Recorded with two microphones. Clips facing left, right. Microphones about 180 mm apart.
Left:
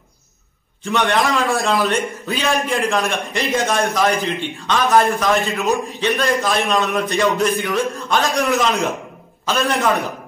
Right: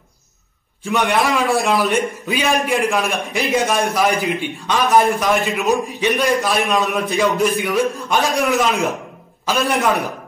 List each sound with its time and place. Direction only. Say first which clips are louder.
0.8 s a man's voice: even; 5° right (ahead or behind)